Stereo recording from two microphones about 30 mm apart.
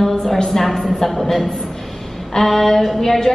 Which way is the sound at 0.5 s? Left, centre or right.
Centre.